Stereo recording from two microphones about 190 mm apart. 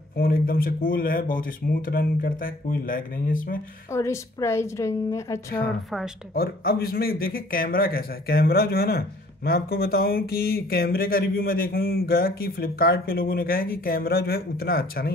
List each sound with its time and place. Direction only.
0.1 s speech: 50° left (ahead or behind)
3.9 s a woman's voice: 15° left (ahead or behind)
5.9 s speech: centre (ahead or behind)
6.3 s speech: 55° left (ahead or behind)